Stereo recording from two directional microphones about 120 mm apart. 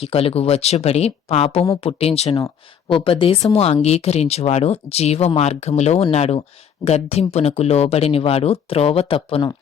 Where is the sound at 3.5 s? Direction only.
60° left (ahead or behind).